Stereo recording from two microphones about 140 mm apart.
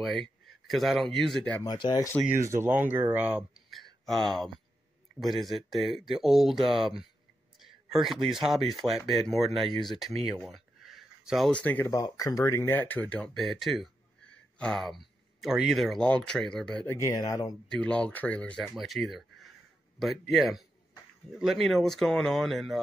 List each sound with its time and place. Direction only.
0.0 s speech: centre (ahead or behind)
1.6 s speech: 30° left (ahead or behind)
2.2 s speech: 20° right (ahead or behind); by 7.1 s 5° right (ahead or behind)
7.5 s a sound: centre (ahead or behind)
8.5 s speech: centre (ahead or behind)
10.3 s a sound: 5° right (ahead or behind)
11.9 s speech: 25° left (ahead or behind); by 16.9 s 5° left (ahead or behind)
16.9 s speech: 25° left (ahead or behind)
17.6 s speech: 5° left (ahead or behind)